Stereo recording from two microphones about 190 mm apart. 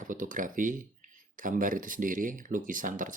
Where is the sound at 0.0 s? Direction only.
45° right (ahead or behind).